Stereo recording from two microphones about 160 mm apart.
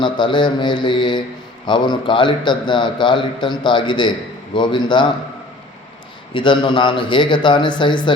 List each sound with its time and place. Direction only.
0.0 s a man's voice: 30° left (ahead or behind)
6.3 s a man's voice: 30° left (ahead or behind)